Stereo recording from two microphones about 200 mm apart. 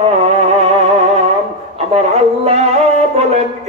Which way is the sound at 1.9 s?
30° right (ahead or behind).